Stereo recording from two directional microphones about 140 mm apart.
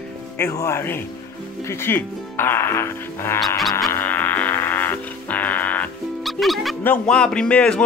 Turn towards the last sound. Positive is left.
turn(degrees=10)  # may be behind; listen again after turning